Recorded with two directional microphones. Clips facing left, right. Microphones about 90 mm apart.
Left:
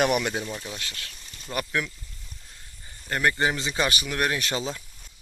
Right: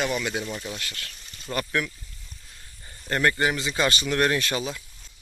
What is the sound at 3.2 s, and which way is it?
Speech, 25° left (ahead or behind).